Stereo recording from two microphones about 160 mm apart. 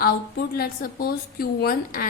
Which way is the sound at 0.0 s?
75° left (ahead or behind).